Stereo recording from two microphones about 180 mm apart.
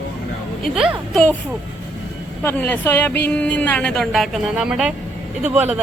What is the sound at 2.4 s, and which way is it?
A woman's voice, 10° left (ahead or behind).